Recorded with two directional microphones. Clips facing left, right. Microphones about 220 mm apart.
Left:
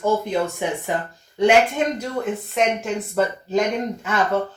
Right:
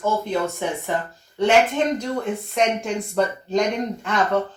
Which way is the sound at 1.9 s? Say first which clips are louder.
Even; 5° left (ahead or behind).